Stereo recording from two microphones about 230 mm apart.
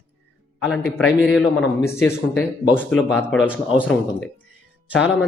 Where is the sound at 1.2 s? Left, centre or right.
Centre.